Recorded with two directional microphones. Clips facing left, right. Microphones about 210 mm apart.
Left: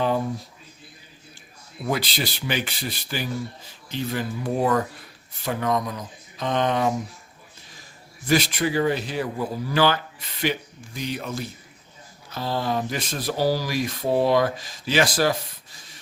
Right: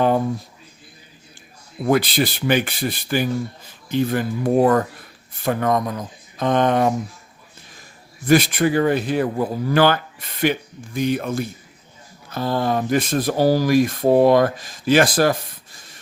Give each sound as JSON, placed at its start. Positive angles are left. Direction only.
{"t": 1.8, "sound": "speech", "side_deg": -55}
{"t": 8.3, "sound": "speech", "side_deg": -55}